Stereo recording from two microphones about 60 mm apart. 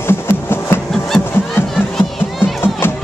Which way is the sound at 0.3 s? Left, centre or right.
Left.